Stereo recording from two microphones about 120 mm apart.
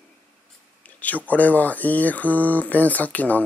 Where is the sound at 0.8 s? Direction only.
15° left (ahead or behind).